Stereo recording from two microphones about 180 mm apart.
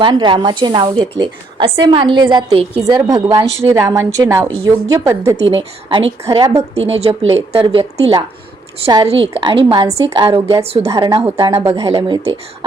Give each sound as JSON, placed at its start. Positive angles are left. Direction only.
{"t": 0.0, "sound": "a woman's voice", "side_deg": -25}
{"t": 2.8, "sound": "a woman's voice", "side_deg": -20}
{"t": 5.5, "sound": "a woman's voice", "side_deg": -30}